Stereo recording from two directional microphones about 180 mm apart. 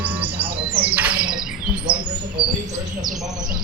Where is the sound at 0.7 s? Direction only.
10° right (ahead or behind).